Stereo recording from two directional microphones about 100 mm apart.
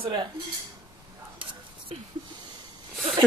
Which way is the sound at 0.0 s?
50° right (ahead or behind).